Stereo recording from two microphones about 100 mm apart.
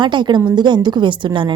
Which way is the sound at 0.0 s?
50° right (ahead or behind).